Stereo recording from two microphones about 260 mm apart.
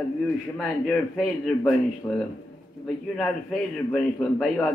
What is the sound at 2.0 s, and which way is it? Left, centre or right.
A man's voice, centre.